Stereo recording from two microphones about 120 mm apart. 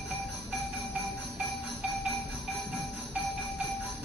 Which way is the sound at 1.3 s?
10° right (ahead or behind).